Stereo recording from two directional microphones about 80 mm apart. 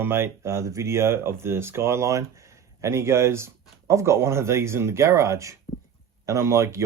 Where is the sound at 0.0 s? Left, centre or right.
Right.